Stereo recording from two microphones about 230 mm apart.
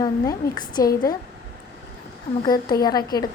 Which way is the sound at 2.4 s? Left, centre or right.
Centre.